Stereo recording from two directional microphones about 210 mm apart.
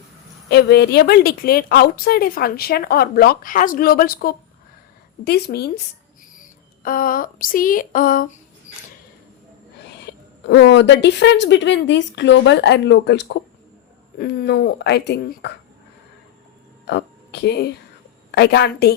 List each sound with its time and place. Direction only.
0.5 s a woman's voice: 50° left (ahead or behind)
6.4 s a sound: 40° left (ahead or behind)
10.4 s a woman's voice: 55° left (ahead or behind)
16.8 s a woman's voice: 50° left (ahead or behind)